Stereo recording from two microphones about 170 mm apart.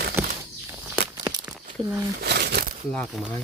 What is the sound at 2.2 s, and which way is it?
Crumpling, 75° right (ahead or behind).